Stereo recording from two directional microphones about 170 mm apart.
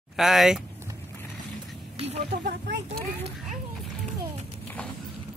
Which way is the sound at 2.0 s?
40° right (ahead or behind).